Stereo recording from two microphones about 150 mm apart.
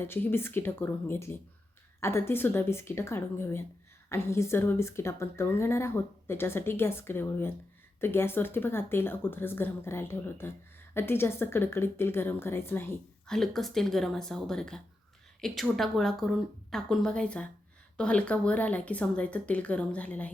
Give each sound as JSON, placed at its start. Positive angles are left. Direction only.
{"t": 0.0, "sound": "speech", "side_deg": 15}
{"t": 13.2, "sound": "a woman's voice", "side_deg": 5}